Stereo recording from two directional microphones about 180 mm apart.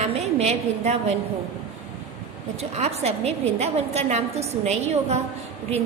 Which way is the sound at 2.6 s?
35° right (ahead or behind).